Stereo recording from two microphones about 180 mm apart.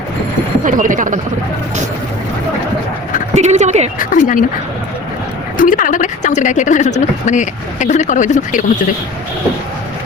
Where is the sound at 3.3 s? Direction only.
40° right (ahead or behind).